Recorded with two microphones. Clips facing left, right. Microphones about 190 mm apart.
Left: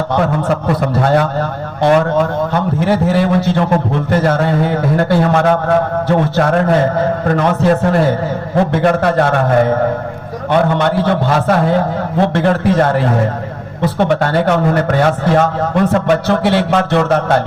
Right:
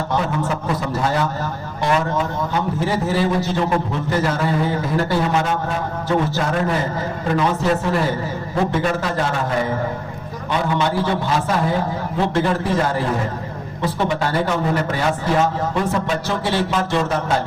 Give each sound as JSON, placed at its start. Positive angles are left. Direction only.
{"t": 0.2, "sound": "a man's voice", "side_deg": 60}